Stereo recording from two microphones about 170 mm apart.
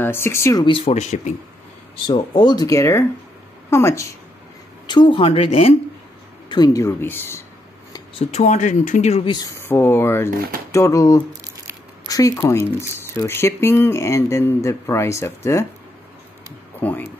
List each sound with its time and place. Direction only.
0.0 s speech: 15° left (ahead or behind)
0.7 s speech: 35° left (ahead or behind)
2.0 s speech: 25° left (ahead or behind)
4.8 s speech: 25° left (ahead or behind)
6.5 s speech: 20° left (ahead or behind)
7.9 s speech: 35° left (ahead or behind)
9.3 s speech: 20° left (ahead or behind)
10.3 s speech: 60° right (ahead or behind)
10.7 s speech: 20° left (ahead or behind)
16.8 s speech: 10° left (ahead or behind)